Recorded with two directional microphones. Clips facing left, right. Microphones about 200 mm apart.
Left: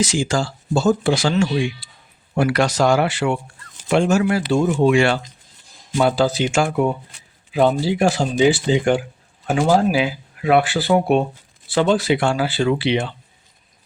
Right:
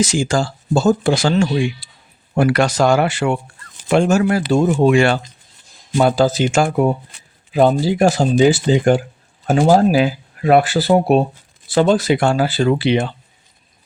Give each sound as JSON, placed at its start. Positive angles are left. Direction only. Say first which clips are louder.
{"t": 0.0, "sound": "speech", "louder": "right 3 dB", "side_deg": -45}